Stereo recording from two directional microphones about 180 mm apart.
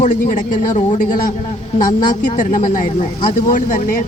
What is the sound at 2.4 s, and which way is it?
A man's voice, 45° left (ahead or behind).